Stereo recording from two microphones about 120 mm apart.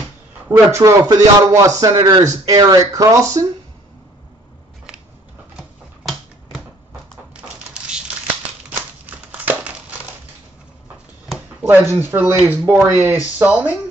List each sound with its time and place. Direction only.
0.5 s speech: 25° right (ahead or behind)
5.6 s typewriter: centre (ahead or behind)
7.7 s a sound: 5° right (ahead or behind)
8.6 s crumpling: 10° right (ahead or behind)
11.8 s speech: 20° right (ahead or behind)